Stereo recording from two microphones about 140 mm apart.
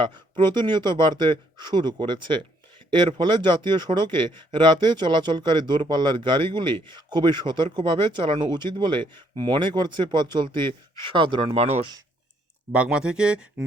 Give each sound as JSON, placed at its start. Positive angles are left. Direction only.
{"t": 0.0, "sound": "speech", "side_deg": -35}
{"t": 11.5, "sound": "speech", "side_deg": -50}
{"t": 12.7, "sound": "speech", "side_deg": -5}